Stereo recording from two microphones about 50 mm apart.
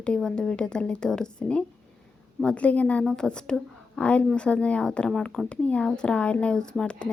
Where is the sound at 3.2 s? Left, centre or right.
Centre.